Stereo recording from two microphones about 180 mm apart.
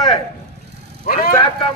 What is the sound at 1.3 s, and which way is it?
Speech, 30° left (ahead or behind).